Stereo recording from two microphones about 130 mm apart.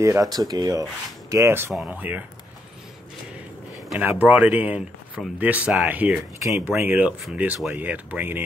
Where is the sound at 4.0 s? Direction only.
10° right (ahead or behind).